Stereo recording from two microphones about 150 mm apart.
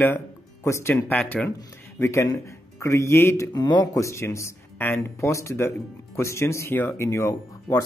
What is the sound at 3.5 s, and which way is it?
Speech, 30° left (ahead or behind).